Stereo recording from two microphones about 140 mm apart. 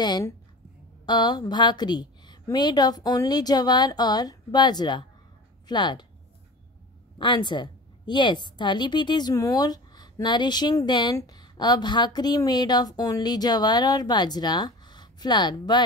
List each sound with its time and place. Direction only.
0.0 s a woman's voice: 30° left (ahead or behind)
7.2 s a woman's voice: 35° left (ahead or behind)